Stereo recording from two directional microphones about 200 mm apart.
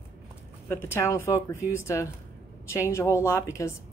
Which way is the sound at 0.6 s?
10° left (ahead or behind).